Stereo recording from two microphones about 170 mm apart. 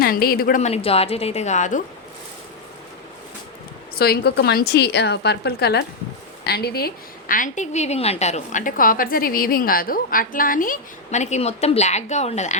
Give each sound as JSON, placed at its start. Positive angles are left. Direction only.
{"t": 0.0, "sound": "speech", "side_deg": 60}
{"t": 0.6, "sound": "a woman's voice", "side_deg": 35}
{"t": 3.9, "sound": "a woman's voice", "side_deg": 65}